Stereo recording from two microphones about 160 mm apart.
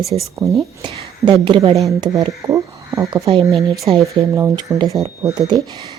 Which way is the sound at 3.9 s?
20° right (ahead or behind).